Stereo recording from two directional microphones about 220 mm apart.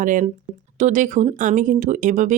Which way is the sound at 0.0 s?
35° right (ahead or behind).